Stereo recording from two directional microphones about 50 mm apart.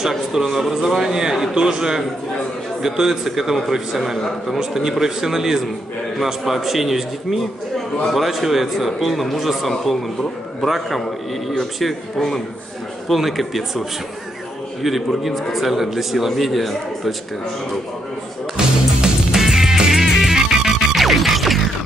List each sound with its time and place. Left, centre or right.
0.3 s a man's voice: centre
18.6 s music: centre